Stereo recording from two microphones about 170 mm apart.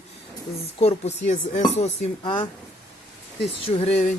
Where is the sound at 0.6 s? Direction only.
35° left (ahead or behind).